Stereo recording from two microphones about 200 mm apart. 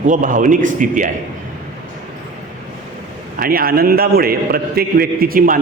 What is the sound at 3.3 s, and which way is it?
A man's voice, 45° right (ahead or behind).